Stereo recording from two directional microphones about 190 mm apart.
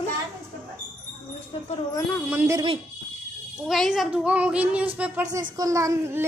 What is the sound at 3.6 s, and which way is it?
A child's voice, centre (ahead or behind).